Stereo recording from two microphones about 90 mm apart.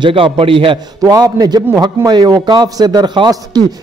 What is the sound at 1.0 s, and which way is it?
A man's voice, 45° right (ahead or behind).